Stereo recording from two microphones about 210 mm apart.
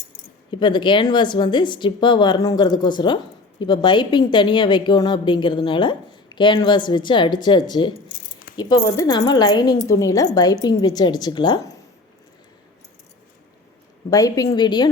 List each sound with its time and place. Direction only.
0.5 s a woman's voice: 20° left (ahead or behind)
14.1 s a woman's voice: 15° left (ahead or behind)